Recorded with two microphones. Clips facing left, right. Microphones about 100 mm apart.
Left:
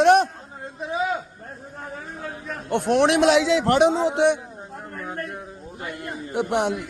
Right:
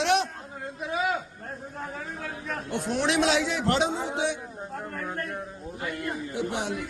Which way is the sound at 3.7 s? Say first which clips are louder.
Left 7 dB; 65° left (ahead or behind).